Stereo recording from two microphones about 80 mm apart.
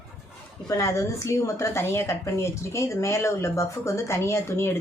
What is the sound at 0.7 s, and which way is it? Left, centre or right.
A woman's voice, left.